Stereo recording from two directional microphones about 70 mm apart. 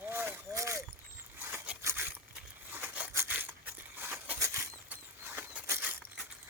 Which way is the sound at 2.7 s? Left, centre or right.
Right.